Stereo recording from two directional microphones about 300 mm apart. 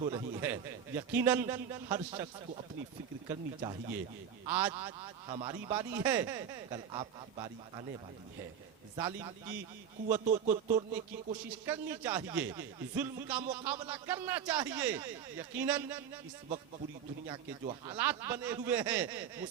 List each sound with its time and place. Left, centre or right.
0.0 s speech: centre
3.2 s speech: centre
4.4 s speech: centre
9.0 s speech: centre
10.2 s music: right
11.3 s speech: centre
17.2 s speech: centre
17.9 s speech: centre